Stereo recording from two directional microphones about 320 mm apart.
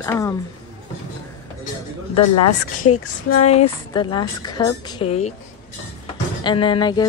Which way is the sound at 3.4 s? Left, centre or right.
Centre.